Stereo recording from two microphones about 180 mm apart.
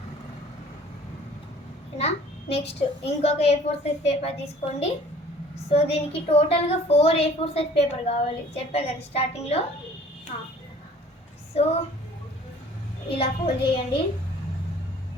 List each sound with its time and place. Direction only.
2.0 s a woman's voice: 35° left (ahead or behind)
11.6 s a woman's voice: 35° left (ahead or behind)
13.1 s a woman's voice: 35° left (ahead or behind)